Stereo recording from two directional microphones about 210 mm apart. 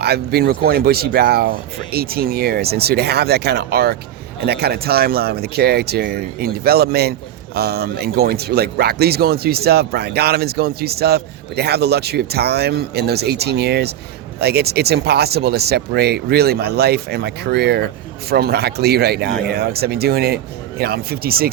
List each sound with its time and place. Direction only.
0.0 s speech: 50° right (ahead or behind)